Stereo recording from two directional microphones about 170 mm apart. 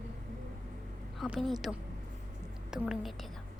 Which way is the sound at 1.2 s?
Centre (ahead or behind).